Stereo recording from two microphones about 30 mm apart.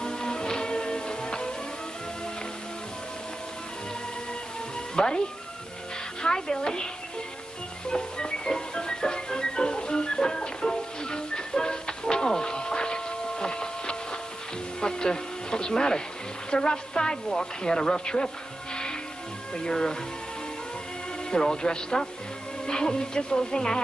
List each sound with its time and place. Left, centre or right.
0.0 s music: left
4.9 s speech: left
6.2 s speech: left
7.9 s music: left
14.8 s a sound: left
16.4 s speech: left
19.5 s speech: left
21.3 s speech: left